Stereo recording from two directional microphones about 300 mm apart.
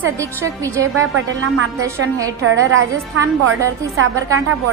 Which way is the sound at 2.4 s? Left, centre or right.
Right.